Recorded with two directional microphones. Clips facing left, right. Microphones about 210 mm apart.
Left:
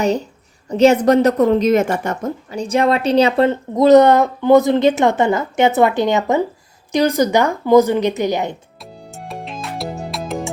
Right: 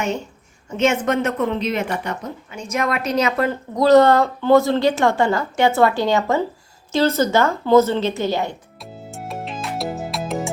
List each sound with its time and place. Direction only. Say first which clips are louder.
0.0 s a woman's voice: left 6 dB; 35° left (ahead or behind); by 8.5 s 15° left (ahead or behind)
8.8 s music: right 1 dB; centre (ahead or behind)